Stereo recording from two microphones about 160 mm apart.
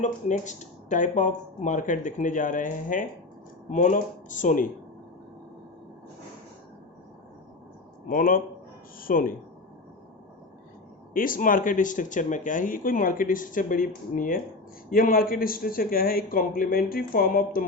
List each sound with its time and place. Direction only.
0.0 s speech: 50° left (ahead or behind)
8.0 s speech: 60° left (ahead or behind)
11.1 s speech: 60° left (ahead or behind)